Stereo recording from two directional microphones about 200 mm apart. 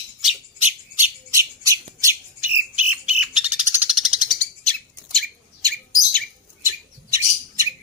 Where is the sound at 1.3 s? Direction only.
15° right (ahead or behind); by 5.2 s centre (ahead or behind).